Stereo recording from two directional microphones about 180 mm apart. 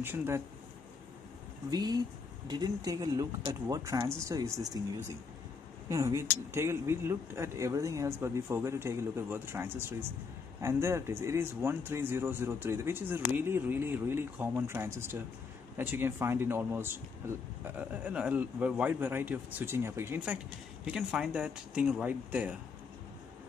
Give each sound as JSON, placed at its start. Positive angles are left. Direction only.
{"t": 0.0, "sound": "speech", "side_deg": -10}
{"t": 1.7, "sound": "speech", "side_deg": -20}
{"t": 5.9, "sound": "speech", "side_deg": -15}